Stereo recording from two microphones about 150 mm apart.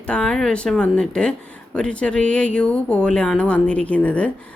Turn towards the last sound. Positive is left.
turn(degrees=10)  # may be behind; listen again after turning